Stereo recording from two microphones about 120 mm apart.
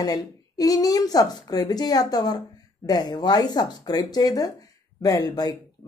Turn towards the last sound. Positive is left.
turn(degrees=30)  # may be behind; listen again after turning